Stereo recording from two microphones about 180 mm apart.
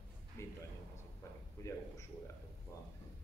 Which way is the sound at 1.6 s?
15° left (ahead or behind).